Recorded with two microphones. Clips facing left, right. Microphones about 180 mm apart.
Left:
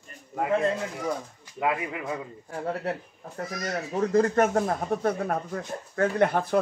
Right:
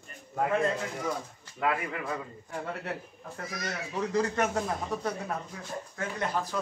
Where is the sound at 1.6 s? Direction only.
20° left (ahead or behind).